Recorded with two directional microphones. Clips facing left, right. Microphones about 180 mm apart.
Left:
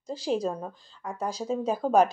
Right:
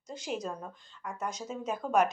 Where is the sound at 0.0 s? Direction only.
30° left (ahead or behind).